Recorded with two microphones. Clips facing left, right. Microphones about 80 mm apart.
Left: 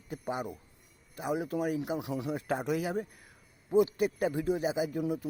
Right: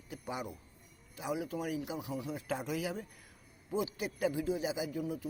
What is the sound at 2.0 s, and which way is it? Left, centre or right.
Speech, left.